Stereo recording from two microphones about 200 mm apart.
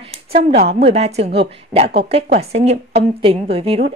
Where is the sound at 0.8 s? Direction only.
30° right (ahead or behind).